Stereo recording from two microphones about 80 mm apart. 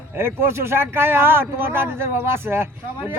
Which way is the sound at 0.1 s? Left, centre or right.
Right.